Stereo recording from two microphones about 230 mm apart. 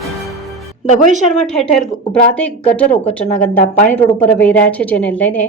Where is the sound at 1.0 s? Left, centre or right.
Right.